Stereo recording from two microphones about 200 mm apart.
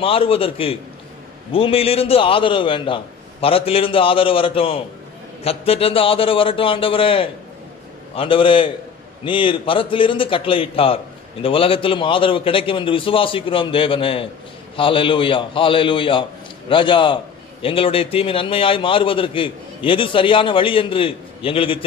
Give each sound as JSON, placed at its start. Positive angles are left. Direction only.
{"t": 0.0, "sound": "a man's voice", "side_deg": 25}